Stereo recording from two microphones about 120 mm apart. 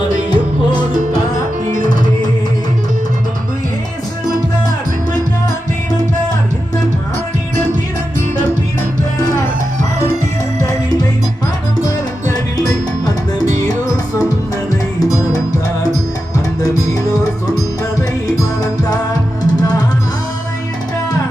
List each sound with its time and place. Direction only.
0.3 s music: 40° left (ahead or behind)
14.9 s music: 30° left (ahead or behind)